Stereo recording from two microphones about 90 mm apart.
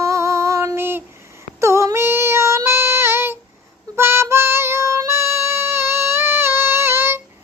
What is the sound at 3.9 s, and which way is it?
Music, 25° right (ahead or behind).